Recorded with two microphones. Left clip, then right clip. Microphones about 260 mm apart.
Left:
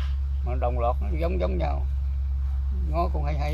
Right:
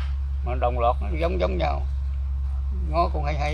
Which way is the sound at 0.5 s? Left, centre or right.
Right.